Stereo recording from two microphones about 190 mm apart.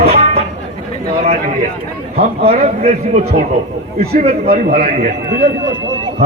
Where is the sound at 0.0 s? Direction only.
35° right (ahead or behind).